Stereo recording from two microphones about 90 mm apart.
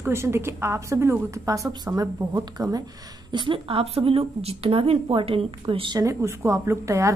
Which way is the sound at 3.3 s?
65° right (ahead or behind).